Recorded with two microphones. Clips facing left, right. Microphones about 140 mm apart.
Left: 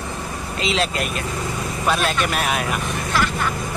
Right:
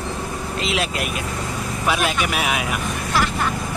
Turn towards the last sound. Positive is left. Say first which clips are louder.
# even
turn(degrees=-5)  # may be behind; listen again after turning